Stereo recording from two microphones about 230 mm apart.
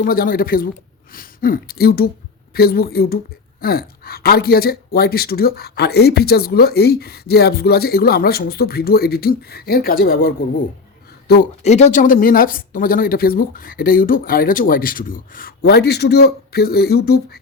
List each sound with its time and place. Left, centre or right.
0.0 s a woman's voice: left
11.6 s a woman's voice: left